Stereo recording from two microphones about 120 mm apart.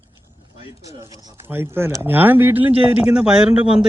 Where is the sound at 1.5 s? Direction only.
20° right (ahead or behind).